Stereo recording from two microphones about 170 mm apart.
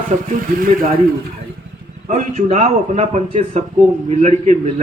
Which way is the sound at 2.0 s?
45° right (ahead or behind).